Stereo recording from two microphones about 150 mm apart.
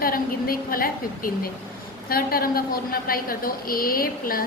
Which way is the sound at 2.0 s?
80° left.